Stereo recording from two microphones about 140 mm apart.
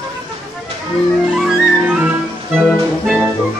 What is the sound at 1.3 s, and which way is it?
Music, 5° right (ahead or behind).